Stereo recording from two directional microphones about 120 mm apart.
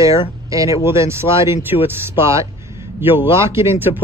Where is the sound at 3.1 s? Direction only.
20° right (ahead or behind).